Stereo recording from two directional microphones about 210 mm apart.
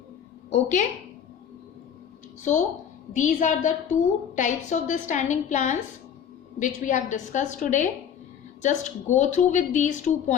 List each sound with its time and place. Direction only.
0.5 s a woman's voice: 35° left (ahead or behind)
3.2 s a woman's voice: 35° left (ahead or behind)